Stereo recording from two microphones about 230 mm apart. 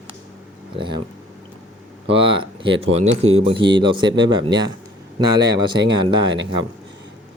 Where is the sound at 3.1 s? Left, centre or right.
Right.